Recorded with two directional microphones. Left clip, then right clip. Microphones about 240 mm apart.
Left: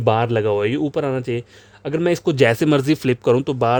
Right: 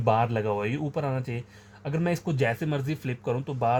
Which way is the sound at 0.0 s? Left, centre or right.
Left.